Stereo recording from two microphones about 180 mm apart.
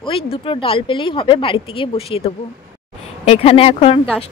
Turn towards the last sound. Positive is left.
turn(degrees=30)  # may be behind; listen again after turning